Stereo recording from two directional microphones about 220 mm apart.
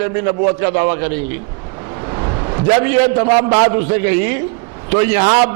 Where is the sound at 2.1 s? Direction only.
20° right (ahead or behind).